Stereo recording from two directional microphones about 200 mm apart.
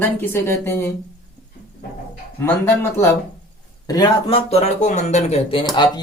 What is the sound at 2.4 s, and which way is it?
Speech, 10° left (ahead or behind).